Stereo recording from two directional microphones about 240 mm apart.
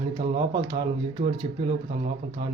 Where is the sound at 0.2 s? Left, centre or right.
Centre.